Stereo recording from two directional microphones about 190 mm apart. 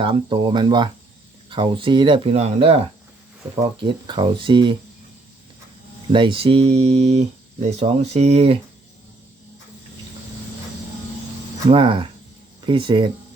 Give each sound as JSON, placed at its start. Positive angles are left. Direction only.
{"t": 0.0, "sound": "speech", "side_deg": -25}
{"t": 6.1, "sound": "speech", "side_deg": -25}
{"t": 11.7, "sound": "speech", "side_deg": -25}